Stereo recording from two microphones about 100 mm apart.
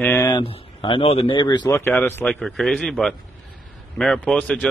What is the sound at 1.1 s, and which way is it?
Speech, 75° left (ahead or behind).